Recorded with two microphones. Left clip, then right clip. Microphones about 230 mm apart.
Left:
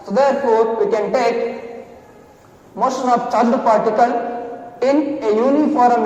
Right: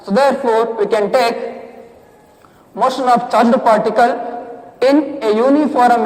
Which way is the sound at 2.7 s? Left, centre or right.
Right.